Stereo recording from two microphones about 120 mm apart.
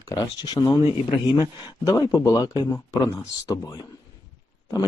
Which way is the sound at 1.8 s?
30° left (ahead or behind).